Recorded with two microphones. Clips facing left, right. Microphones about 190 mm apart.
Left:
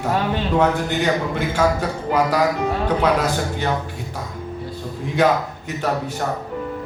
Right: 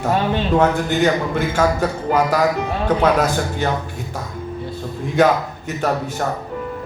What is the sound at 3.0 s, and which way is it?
Speech, 45° right (ahead or behind).